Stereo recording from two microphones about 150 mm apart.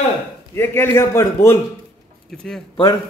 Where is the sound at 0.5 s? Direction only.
15° left (ahead or behind).